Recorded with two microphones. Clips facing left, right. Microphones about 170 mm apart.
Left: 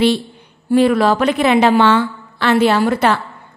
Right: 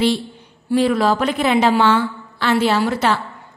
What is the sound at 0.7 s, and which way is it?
A woman's voice, 55° left (ahead or behind).